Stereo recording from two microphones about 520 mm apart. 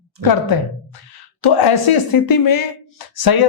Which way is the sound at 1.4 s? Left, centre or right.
Left.